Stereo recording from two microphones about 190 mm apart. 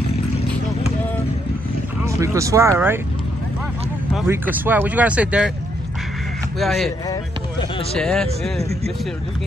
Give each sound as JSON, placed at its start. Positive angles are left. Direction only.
{"t": 2.0, "sound": "speech", "side_deg": -15}
{"t": 4.3, "sound": "speech", "side_deg": -10}
{"t": 6.6, "sound": "speech", "side_deg": 0}
{"t": 8.0, "sound": "speech", "side_deg": 5}